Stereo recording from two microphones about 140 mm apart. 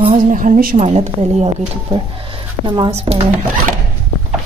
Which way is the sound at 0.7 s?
50° right (ahead or behind).